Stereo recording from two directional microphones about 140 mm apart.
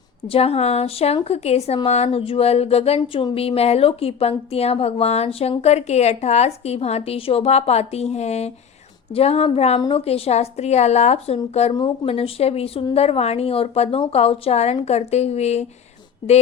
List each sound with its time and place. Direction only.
0.3 s speech: 45° left (ahead or behind)